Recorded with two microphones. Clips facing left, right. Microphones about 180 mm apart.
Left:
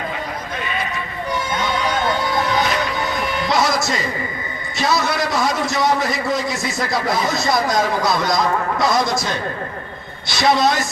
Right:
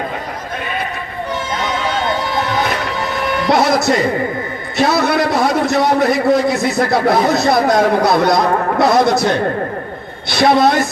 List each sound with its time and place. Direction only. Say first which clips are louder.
3.5 s a man's voice: right 7 dB; 60° right (ahead or behind)